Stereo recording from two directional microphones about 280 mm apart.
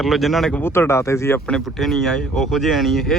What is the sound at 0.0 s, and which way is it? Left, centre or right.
Speech, centre.